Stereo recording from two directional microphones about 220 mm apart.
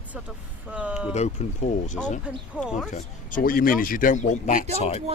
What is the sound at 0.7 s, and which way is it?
Speech, 5° right (ahead or behind).